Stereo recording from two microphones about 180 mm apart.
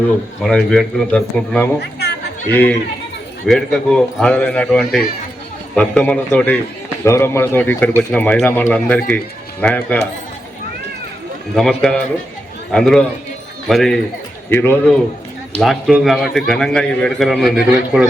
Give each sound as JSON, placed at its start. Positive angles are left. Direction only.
{"t": 0.4, "sound": "a man's voice", "side_deg": 5}
{"t": 1.8, "sound": "speech", "side_deg": 65}
{"t": 2.5, "sound": "a man's voice", "side_deg": 10}
{"t": 11.5, "sound": "a man's voice", "side_deg": 0}
{"t": 15.6, "sound": "a man's voice", "side_deg": 0}